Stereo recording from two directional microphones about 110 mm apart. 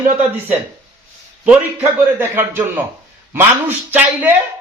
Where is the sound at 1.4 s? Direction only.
15° right (ahead or behind).